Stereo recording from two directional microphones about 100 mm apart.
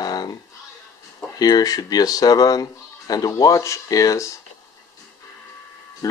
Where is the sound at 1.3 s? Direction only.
40° left (ahead or behind).